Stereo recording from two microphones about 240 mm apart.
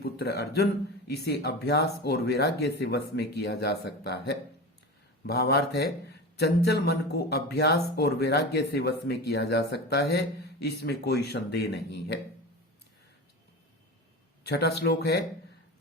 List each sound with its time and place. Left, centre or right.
0.0 s speech: left
14.4 s speech: left